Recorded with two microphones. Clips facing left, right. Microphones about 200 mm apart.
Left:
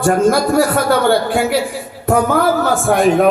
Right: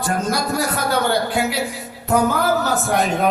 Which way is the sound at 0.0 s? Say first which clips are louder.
Left 9 dB; 50° left (ahead or behind).